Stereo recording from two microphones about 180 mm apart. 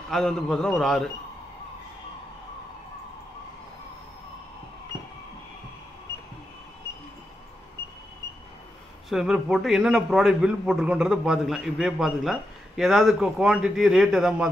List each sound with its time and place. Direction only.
0.1 s a man's voice: 5° left (ahead or behind)
9.1 s a man's voice: centre (ahead or behind)